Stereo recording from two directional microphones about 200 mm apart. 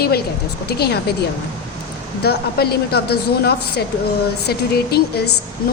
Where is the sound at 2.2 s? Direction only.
50° left (ahead or behind).